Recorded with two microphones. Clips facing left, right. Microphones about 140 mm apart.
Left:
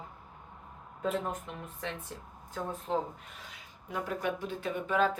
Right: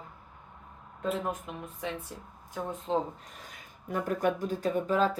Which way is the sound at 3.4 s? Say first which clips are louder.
Right 2 dB; 45° right (ahead or behind).